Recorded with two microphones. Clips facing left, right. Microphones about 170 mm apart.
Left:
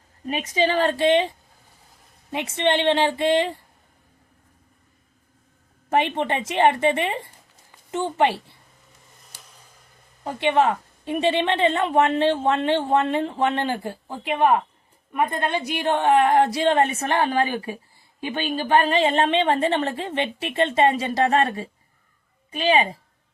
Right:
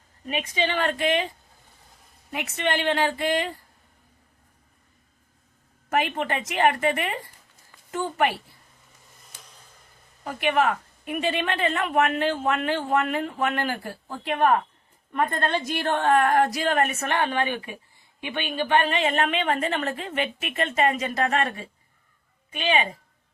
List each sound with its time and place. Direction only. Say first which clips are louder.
0.3 s a woman's voice: left 4 dB; 35° left (ahead or behind)
2.3 s a woman's voice: left 5 dB; 25° left (ahead or behind)
5.9 s a woman's voice: left 3 dB; 25° left (ahead or behind)
10.2 s a woman's voice: left 3 dB; 25° left (ahead or behind)